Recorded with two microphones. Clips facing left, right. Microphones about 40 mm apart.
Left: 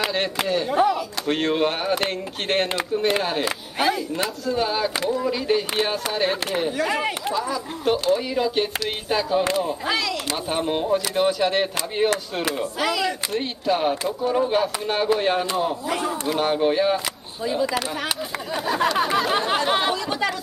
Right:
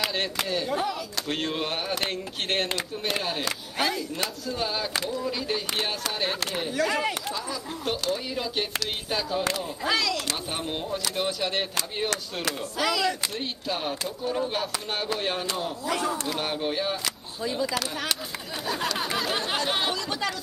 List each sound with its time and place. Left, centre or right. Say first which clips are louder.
0.0 s speech: left 5 dB; left
0.7 s speech: left 8 dB; centre
1.6 s speech: left 7 dB; left
3.7 s speech: left 6 dB; centre
4.5 s speech: left 8 dB; left
6.8 s speech: left 2 dB; left
7.3 s speech: left 7 dB; centre
9.1 s speech: left 7 dB; left